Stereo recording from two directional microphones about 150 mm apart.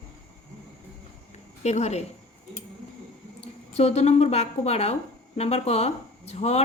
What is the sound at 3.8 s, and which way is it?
Speech, 45° left (ahead or behind).